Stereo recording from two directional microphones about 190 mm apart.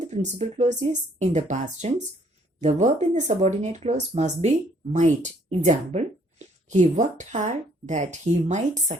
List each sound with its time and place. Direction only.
0.0 s speech: 35° right (ahead or behind)